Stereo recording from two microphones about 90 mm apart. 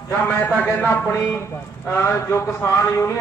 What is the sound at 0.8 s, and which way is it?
A man's voice, 25° left (ahead or behind).